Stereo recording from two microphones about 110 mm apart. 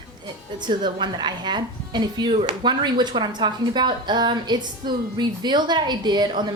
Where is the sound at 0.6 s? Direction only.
45° right (ahead or behind).